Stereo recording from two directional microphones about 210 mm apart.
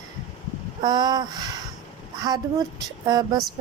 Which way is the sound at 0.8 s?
20° right (ahead or behind).